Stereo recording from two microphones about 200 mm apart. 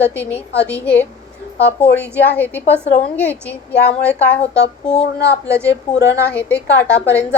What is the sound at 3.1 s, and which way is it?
A woman's voice, 10° left (ahead or behind).